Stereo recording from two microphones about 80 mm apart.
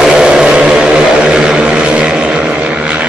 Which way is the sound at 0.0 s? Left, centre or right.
Centre.